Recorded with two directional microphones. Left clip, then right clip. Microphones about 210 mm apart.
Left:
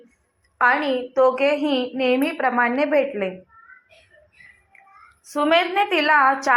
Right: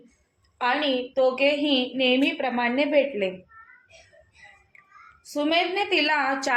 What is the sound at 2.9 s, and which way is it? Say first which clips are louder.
Speech: left 2 dB; 40° left (ahead or behind).